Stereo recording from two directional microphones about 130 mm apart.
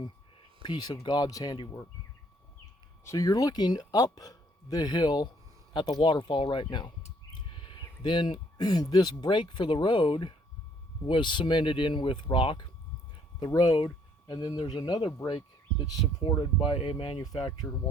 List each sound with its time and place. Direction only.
0.6 s speech: 35° left (ahead or behind)
3.0 s speech: 25° left (ahead or behind)
13.4 s speech: 30° left (ahead or behind)